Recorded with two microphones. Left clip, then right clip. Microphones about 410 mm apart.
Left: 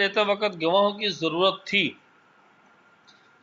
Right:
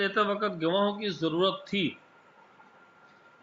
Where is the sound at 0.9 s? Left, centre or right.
Left.